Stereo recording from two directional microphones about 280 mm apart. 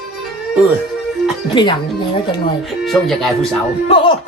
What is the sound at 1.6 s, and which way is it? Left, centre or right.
Speech, centre.